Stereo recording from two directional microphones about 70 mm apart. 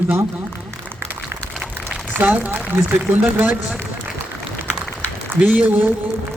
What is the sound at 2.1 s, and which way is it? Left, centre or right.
Speech, right.